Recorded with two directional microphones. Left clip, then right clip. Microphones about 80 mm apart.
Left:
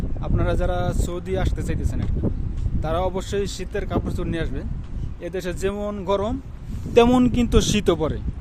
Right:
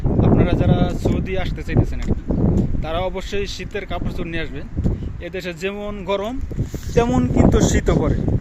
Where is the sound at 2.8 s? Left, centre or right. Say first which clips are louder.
Right 1 dB; left.